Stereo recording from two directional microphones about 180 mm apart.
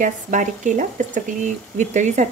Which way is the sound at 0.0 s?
45° right (ahead or behind).